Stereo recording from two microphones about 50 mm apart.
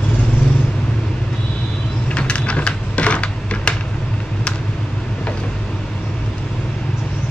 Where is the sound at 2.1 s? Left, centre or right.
Left.